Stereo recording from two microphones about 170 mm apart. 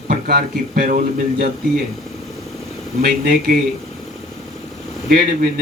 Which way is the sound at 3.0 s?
55° right (ahead or behind).